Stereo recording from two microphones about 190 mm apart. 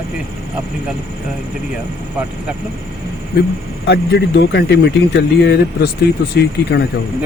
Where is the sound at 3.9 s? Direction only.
65° left (ahead or behind).